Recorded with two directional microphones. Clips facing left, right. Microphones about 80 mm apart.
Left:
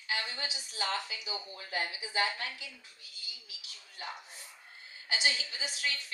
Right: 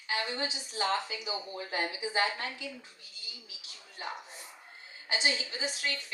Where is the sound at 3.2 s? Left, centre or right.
Right.